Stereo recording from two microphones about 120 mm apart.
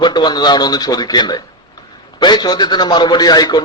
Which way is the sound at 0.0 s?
40° left (ahead or behind).